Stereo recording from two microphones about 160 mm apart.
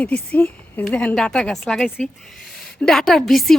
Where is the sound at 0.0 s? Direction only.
10° left (ahead or behind).